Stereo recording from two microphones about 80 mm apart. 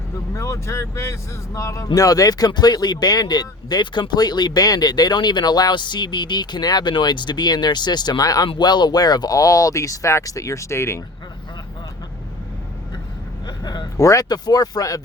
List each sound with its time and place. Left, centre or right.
0.3 s speech: left
8.4 s speech: left
13.9 s speech: left
14.3 s speech: left